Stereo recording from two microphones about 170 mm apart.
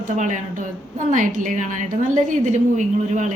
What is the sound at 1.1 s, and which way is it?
A woman's voice, 50° right (ahead or behind).